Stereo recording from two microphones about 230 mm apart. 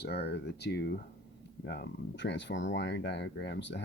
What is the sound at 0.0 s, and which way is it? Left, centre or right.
Speech, left.